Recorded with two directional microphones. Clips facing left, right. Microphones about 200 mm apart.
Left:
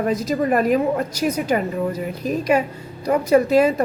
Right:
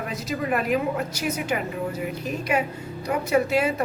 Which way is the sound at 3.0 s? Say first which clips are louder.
Left 6 dB; 35° left (ahead or behind).